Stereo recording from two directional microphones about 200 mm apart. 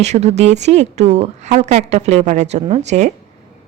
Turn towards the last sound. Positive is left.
turn(degrees=-35)  # may be behind; listen again after turning